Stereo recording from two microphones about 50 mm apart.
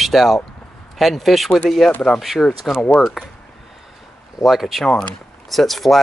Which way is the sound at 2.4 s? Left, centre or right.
Left.